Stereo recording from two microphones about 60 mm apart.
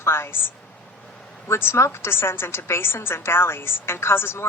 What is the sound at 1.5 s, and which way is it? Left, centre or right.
A woman's voice, left.